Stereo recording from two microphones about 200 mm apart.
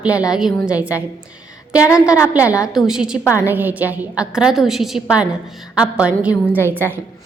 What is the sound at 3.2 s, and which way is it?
Speech, 10° left (ahead or behind).